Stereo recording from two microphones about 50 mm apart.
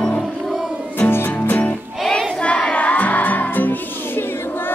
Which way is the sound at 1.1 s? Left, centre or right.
Left.